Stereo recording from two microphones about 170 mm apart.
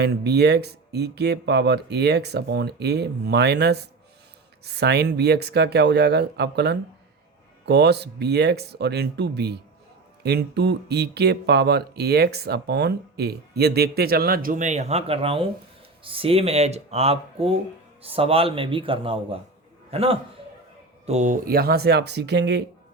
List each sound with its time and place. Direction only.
0.0 s a man's voice: 75° right (ahead or behind); by 21.3 s 40° right (ahead or behind)
21.4 s speech: 65° right (ahead or behind); by 22.6 s 85° right